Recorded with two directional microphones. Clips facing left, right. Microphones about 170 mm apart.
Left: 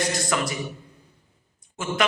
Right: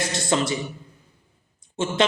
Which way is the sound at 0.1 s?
25° right (ahead or behind).